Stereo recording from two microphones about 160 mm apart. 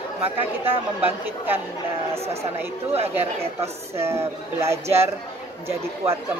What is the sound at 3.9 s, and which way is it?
Speech, 15° right (ahead or behind).